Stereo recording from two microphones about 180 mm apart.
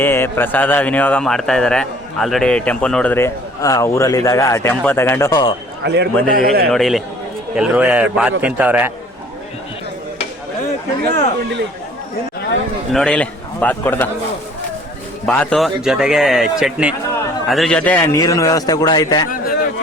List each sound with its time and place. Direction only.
0.0 s a man's voice: 10° left (ahead or behind)
5.8 s speech: 70° right (ahead or behind)
6.3 s speech: 55° right (ahead or behind)
6.7 s a man's voice: centre (ahead or behind)
11.0 s speech: 75° right (ahead or behind)
12.9 s a man's voice: 5° left (ahead or behind)
15.3 s a man's voice: 5° left (ahead or behind); by 19.3 s 20° left (ahead or behind)